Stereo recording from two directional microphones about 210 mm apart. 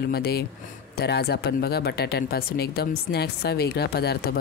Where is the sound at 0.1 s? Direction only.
50° left (ahead or behind).